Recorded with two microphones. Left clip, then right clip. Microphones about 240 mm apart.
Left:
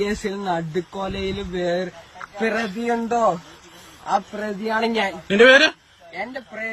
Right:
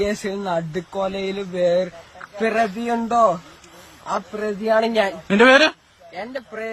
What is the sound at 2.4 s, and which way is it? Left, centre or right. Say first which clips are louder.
Speech: right 3 dB; centre.